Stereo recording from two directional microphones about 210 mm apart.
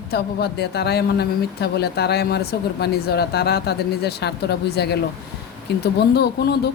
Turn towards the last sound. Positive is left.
turn(degrees=50)  # may be behind; listen again after turning